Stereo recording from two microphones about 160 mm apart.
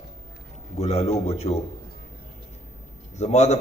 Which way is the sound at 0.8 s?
40° left (ahead or behind).